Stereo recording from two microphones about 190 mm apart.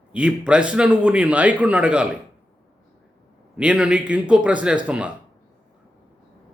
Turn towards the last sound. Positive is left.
turn(degrees=-5)  # may be behind; listen again after turning